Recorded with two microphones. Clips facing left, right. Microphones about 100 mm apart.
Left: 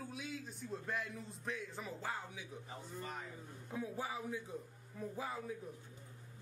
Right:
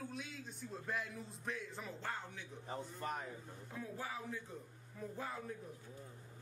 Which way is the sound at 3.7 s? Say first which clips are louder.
Left 4 dB; 15° left (ahead or behind).